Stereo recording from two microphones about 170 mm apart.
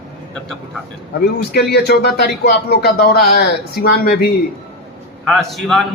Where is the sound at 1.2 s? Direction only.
70° left (ahead or behind).